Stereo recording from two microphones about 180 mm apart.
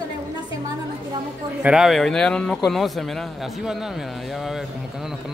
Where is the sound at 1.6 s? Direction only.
5° right (ahead or behind).